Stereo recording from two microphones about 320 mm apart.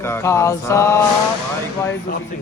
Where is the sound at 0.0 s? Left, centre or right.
Centre.